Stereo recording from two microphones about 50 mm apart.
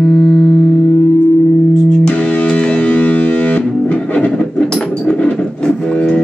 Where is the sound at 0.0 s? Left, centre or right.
Centre.